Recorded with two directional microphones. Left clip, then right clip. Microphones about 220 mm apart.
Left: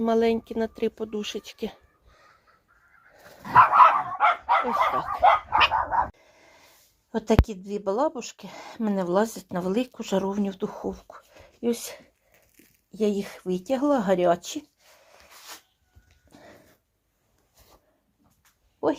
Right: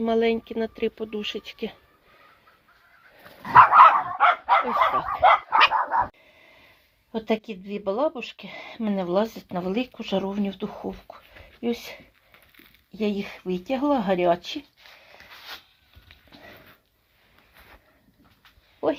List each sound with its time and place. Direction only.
0.0 s a woman's voice: 15° left (ahead or behind)
3.4 s dog: 20° left (ahead or behind)
4.6 s a woman's voice: 15° left (ahead or behind)
5.2 s dog: centre (ahead or behind)
6.2 s a sound: 10° left (ahead or behind)
7.1 s a woman's voice: 10° left (ahead or behind)